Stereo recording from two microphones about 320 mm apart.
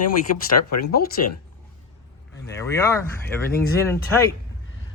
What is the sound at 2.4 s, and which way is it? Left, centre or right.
Speech, centre.